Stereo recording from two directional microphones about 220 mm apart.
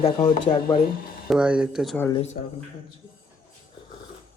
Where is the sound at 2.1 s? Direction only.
25° left (ahead or behind).